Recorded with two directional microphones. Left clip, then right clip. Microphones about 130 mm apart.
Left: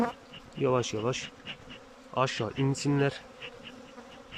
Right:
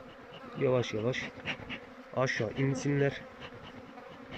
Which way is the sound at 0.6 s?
15° left (ahead or behind).